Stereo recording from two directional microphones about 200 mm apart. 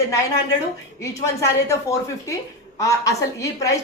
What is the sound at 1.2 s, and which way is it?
A woman's voice, 15° left (ahead or behind).